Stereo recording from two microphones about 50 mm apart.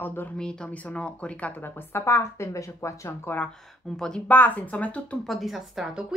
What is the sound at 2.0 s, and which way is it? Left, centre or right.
Speech, left.